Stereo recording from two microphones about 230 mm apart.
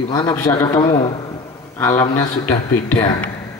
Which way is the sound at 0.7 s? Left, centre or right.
Left.